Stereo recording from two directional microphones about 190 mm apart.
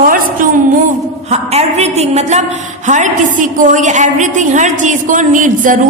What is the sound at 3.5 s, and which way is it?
A woman's voice, 45° right (ahead or behind).